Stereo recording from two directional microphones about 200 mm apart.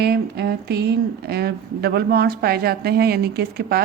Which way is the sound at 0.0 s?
55° right (ahead or behind).